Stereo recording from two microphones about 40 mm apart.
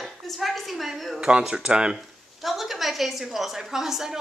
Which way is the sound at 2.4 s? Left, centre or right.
Centre.